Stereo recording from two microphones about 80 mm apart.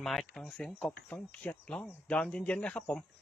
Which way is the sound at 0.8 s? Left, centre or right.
Centre.